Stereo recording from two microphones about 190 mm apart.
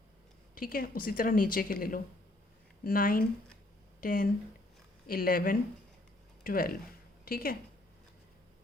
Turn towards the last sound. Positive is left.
turn(degrees=50)  # may be behind; listen again after turning